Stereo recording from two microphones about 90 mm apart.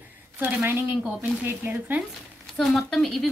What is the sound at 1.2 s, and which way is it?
Speech, 25° right (ahead or behind).